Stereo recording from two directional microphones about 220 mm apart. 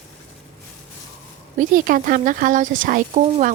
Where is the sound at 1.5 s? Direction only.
40° right (ahead or behind).